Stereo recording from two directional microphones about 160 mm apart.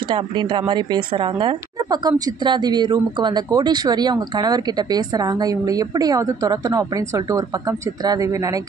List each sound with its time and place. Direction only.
0.1 s a woman's voice: 30° right (ahead or behind)